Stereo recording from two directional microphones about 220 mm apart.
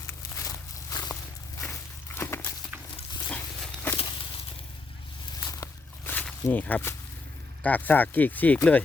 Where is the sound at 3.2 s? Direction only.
5° left (ahead or behind).